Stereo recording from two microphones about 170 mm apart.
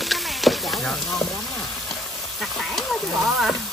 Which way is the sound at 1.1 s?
20° left (ahead or behind).